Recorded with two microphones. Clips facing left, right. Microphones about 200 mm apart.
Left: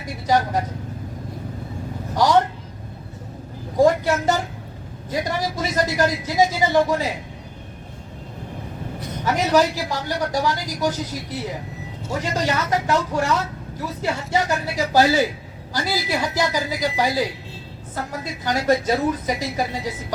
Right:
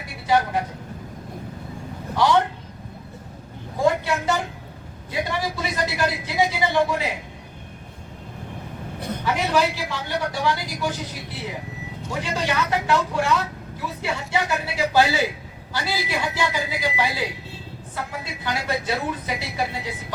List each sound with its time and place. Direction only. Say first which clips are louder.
0.3 s speech: left 1 dB; 40° left (ahead or behind)
2.1 s speech: left 2 dB; 40° left (ahead or behind)
3.8 s a woman's voice: left 4 dB; 40° left (ahead or behind)
9.2 s speech: left 4 dB; 40° left (ahead or behind)